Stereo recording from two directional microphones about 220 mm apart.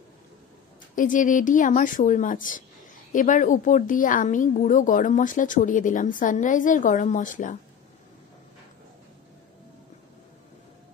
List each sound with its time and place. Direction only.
0.9 s a woman's voice: 35° left (ahead or behind)